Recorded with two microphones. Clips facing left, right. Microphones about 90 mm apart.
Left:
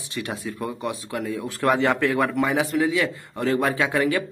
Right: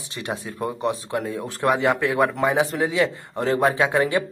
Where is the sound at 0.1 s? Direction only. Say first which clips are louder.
Even; 25° right (ahead or behind).